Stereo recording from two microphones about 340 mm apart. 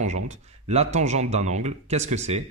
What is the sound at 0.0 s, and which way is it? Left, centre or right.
Speech, centre.